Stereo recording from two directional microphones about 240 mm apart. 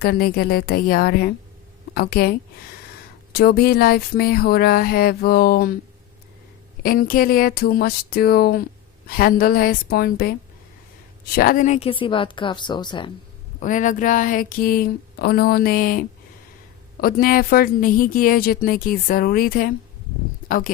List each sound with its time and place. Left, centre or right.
0.0 s a woman's voice: left
3.3 s a woman's voice: left
6.8 s a woman's voice: left
11.3 s a woman's voice: left; by 13.1 s centre
13.6 s a woman's voice: left